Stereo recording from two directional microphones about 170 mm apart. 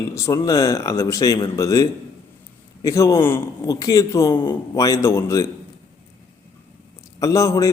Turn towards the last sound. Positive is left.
turn(degrees=20)  # may be behind; listen again after turning